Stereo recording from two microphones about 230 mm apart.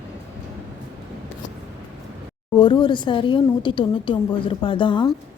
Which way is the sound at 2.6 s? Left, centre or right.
Centre.